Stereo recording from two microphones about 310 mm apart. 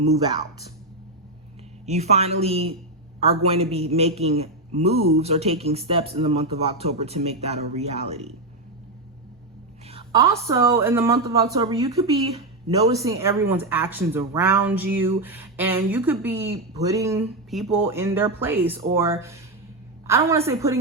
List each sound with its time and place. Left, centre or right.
1.9 s a man's voice: right
9.8 s a woman's voice: centre